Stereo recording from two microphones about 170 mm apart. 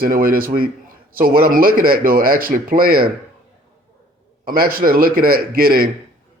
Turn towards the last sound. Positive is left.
turn(degrees=-60)  # may be behind; listen again after turning